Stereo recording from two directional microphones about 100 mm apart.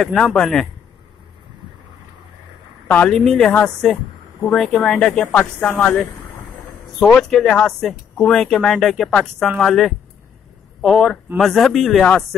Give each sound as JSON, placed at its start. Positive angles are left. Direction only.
{"t": 0.0, "sound": "speech", "side_deg": 5}
{"t": 3.1, "sound": "speech", "side_deg": 5}
{"t": 7.0, "sound": "speech", "side_deg": 0}